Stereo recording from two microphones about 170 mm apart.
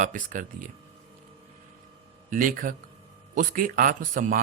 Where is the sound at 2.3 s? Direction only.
55° right (ahead or behind).